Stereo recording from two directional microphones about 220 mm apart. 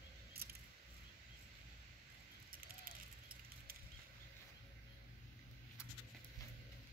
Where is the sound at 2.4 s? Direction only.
40° right (ahead or behind).